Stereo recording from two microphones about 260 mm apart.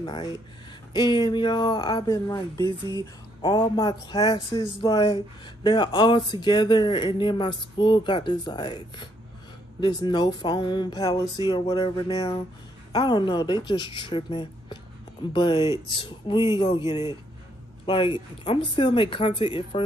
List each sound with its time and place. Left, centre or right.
0.0 s speech: centre